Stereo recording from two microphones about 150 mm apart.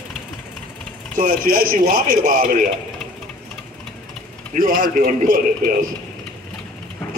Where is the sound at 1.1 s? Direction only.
65° right (ahead or behind).